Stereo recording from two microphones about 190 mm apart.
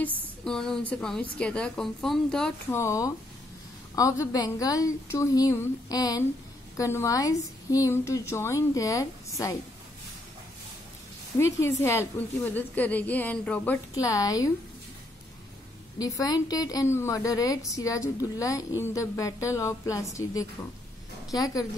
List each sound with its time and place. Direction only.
0.0 s a woman's voice: 5° left (ahead or behind)
2.8 s a woman's voice: 15° left (ahead or behind)
11.3 s a woman's voice: 15° left (ahead or behind)
16.0 s a woman's voice: 20° left (ahead or behind)